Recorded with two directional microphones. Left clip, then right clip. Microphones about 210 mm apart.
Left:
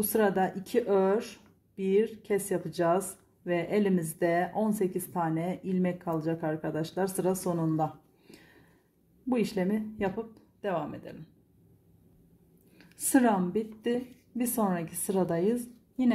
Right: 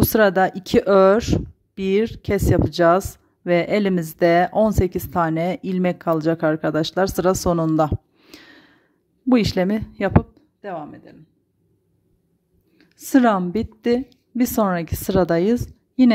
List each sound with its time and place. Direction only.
0.1 s a woman's voice: 40° right (ahead or behind)
10.3 s music: 20° right (ahead or behind)
12.7 s a sound: 20° right (ahead or behind)
13.1 s a woman's voice: 40° right (ahead or behind)